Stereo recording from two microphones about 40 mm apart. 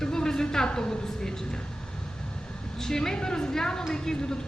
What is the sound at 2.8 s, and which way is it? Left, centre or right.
A woman's voice, centre.